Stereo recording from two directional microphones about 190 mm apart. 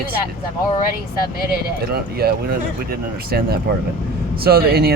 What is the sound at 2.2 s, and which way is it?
Speech, 55° right (ahead or behind).